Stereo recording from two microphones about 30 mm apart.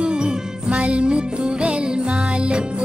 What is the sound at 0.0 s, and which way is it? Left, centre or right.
Music, right.